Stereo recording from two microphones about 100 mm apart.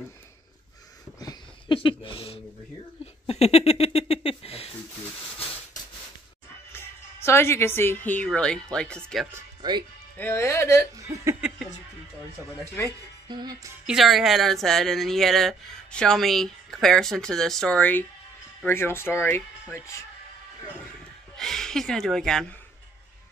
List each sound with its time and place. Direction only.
1.7 s a sound: 55° left (ahead or behind)
3.3 s a sound: 90° left
6.7 s a woman's voice: 25° left (ahead or behind)
8.3 s speech: 5° left (ahead or behind)
9.6 s music: 50° right (ahead or behind)
10.1 s speech: 25° left (ahead or behind)
11.0 s chuckle: 35° right (ahead or behind)
12.8 s speech: 25° left (ahead or behind)
13.3 s music: 45° right (ahead or behind)
13.8 s speech: 5° right (ahead or behind); by 19.4 s 25° left (ahead or behind)
21.4 s speech: 5° left (ahead or behind)